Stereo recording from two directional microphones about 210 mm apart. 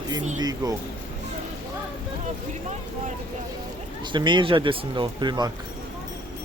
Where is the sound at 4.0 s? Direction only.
20° right (ahead or behind).